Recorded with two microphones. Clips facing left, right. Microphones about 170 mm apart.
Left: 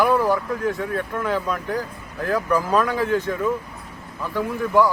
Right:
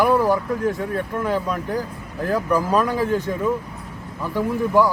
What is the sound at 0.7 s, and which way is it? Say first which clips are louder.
Speech: right 1 dB; 20° right (ahead or behind).